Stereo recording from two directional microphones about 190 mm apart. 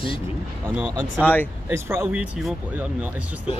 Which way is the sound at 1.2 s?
10° left (ahead or behind).